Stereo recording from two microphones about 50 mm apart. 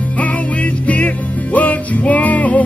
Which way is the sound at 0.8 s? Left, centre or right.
Left.